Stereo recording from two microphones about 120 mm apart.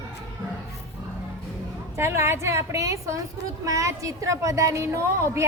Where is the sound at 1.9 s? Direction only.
20° right (ahead or behind).